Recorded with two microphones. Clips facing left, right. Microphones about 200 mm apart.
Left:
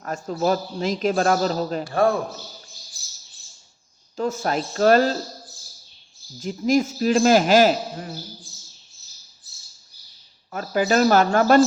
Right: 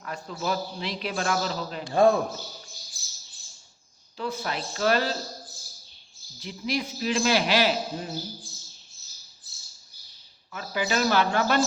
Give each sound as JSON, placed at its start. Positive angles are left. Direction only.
{"t": 0.0, "sound": "a man's voice", "side_deg": 45}
{"t": 1.9, "sound": "a man's voice", "side_deg": -15}
{"t": 4.2, "sound": "a man's voice", "side_deg": 45}
{"t": 6.4, "sound": "a man's voice", "side_deg": 45}
{"t": 10.5, "sound": "a man's voice", "side_deg": 45}